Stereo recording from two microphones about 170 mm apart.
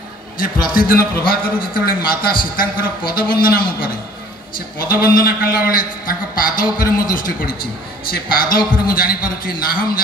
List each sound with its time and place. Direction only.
0.4 s a man's voice: 55° left (ahead or behind)
5.0 s a man's voice: 60° left (ahead or behind)